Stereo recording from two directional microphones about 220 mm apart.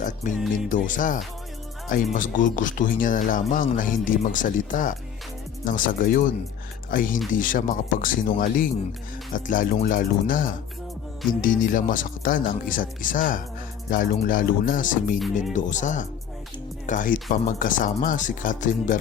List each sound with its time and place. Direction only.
0.0 s speech: 35° left (ahead or behind)